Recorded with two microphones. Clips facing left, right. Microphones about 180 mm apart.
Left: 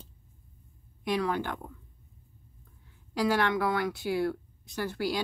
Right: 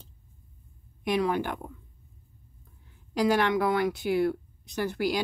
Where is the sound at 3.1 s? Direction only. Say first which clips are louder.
Right 3 dB; 15° right (ahead or behind).